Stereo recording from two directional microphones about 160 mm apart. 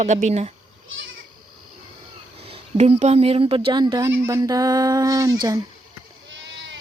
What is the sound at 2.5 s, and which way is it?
Speech, 40° right (ahead or behind).